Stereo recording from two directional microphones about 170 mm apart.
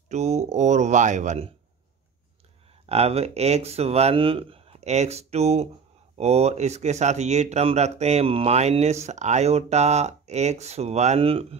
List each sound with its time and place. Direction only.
0.1 s speech: 40° right (ahead or behind)
2.9 s speech: 35° right (ahead or behind)